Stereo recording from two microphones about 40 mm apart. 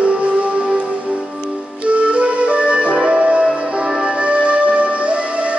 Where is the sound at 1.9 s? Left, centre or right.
Right.